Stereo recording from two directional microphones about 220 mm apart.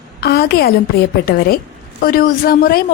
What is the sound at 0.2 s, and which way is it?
A woman's voice, 45° left (ahead or behind).